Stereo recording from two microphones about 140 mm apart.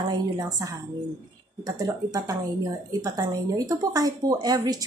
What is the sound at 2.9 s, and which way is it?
A woman's voice, 25° right (ahead or behind).